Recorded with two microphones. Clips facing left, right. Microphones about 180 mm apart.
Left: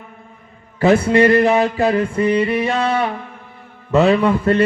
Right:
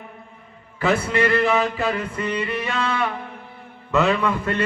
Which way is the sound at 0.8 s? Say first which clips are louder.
Left 8 dB; 40° left (ahead or behind).